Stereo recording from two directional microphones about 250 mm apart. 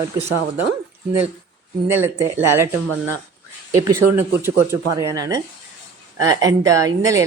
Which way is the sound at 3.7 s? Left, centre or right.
Centre.